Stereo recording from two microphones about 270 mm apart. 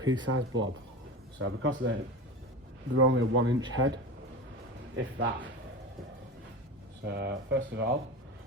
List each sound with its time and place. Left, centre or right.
0.0 s speech: centre
0.3 s speech: right
7.0 s speech: right